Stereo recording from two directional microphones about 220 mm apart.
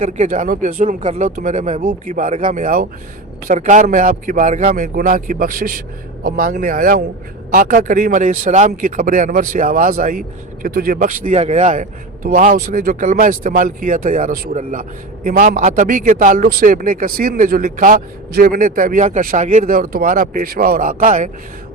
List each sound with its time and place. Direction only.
0.0 s speech: 35° right (ahead or behind)